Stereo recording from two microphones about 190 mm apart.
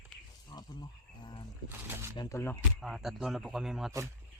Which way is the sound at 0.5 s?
25° left (ahead or behind).